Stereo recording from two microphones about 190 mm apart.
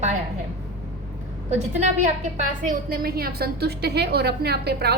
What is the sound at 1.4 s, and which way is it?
Speech, 35° right (ahead or behind).